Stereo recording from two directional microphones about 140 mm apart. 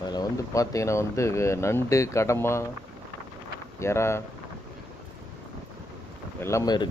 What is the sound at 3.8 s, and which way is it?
Speech, 20° left (ahead or behind).